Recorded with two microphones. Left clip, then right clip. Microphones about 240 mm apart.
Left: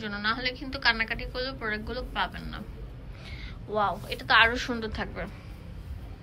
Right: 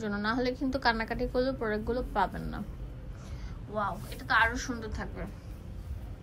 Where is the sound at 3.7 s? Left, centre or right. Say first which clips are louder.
Left 6 dB; centre.